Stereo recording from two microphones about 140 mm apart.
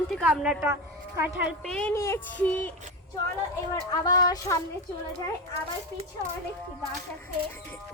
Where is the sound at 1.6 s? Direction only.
5° left (ahead or behind).